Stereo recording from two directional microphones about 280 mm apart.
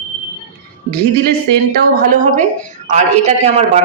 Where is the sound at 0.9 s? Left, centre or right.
Right.